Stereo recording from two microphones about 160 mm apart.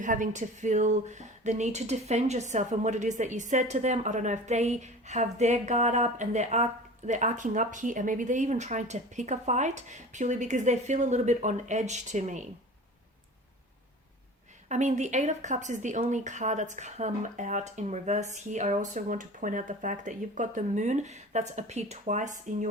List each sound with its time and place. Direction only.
0.0 s speech: 50° right (ahead or behind)
14.7 s speech: 45° right (ahead or behind)